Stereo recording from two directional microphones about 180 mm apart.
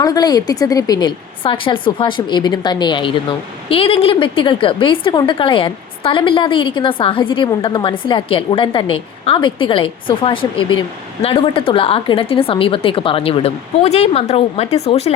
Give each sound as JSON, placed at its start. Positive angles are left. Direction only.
{"t": 0.0, "sound": "a woman's voice", "side_deg": 20}